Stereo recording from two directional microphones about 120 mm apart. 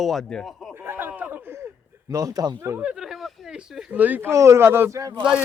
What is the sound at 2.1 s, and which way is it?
Speech, 30° right (ahead or behind).